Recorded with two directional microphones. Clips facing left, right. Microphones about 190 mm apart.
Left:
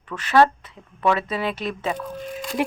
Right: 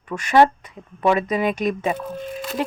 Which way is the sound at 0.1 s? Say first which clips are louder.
Right 2 dB; 15° right (ahead or behind).